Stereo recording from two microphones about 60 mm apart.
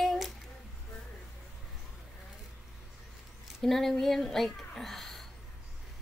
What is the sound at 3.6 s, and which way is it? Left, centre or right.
Speech, centre.